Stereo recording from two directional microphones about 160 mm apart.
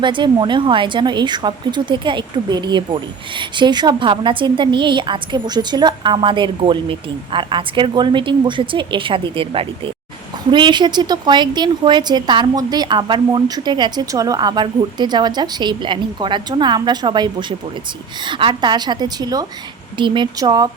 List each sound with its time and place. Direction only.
0.0 s a woman's voice: 30° right (ahead or behind)
18.3 s a woman's voice: 30° right (ahead or behind)